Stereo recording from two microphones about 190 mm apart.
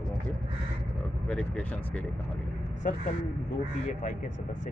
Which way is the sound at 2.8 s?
45° left (ahead or behind).